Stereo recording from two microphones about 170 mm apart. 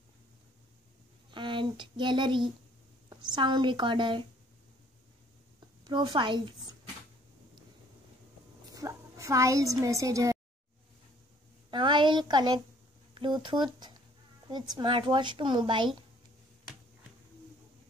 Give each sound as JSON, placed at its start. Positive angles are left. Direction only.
{"t": 1.3, "sound": "speech", "side_deg": -30}
{"t": 5.9, "sound": "speech", "side_deg": -25}
{"t": 8.7, "sound": "a woman's voice", "side_deg": -20}
{"t": 11.7, "sound": "a sound", "side_deg": -30}
{"t": 13.1, "sound": "speech", "side_deg": -30}